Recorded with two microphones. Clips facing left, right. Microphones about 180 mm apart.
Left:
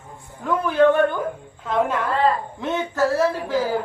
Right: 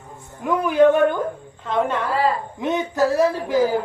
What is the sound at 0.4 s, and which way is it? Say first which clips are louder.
Speech: right 2 dB; 15° right (ahead or behind).